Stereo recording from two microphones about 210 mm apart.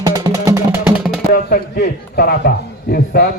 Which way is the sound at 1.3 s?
50° left (ahead or behind).